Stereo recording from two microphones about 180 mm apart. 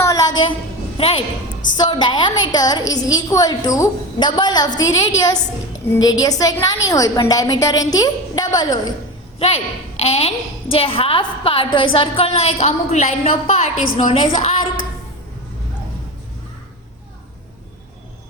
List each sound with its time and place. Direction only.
0.0 s a sound: 20° left (ahead or behind)
0.9 s a woman's voice: 30° left (ahead or behind)
10.0 s a woman's voice: 35° left (ahead or behind)